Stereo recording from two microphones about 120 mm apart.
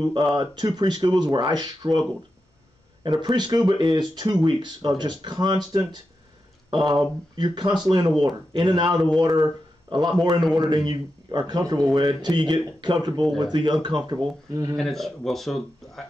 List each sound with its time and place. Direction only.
0.0 s speech: 35° right (ahead or behind)
10.4 s speech: centre (ahead or behind)
10.7 s speech: 35° right (ahead or behind)
14.8 s speech: centre (ahead or behind)